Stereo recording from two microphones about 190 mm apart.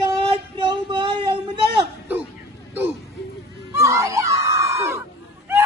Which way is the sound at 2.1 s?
10° right (ahead or behind).